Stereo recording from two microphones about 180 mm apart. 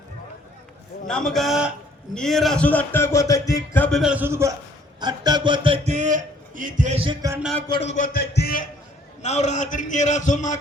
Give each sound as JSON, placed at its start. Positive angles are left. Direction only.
{"t": 1.0, "sound": "a man's voice", "side_deg": 5}
{"t": 3.8, "sound": "a man's voice", "side_deg": 0}
{"t": 7.7, "sound": "a man's voice", "side_deg": 35}
{"t": 9.2, "sound": "a man's voice", "side_deg": 40}